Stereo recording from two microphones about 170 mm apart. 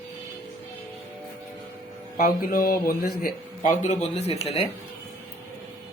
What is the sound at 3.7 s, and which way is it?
Speech, 40° left (ahead or behind).